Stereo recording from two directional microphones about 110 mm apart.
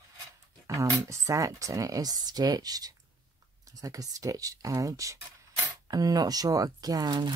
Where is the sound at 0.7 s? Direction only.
30° right (ahead or behind).